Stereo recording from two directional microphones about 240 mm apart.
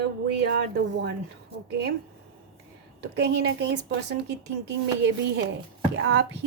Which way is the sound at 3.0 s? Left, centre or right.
Right.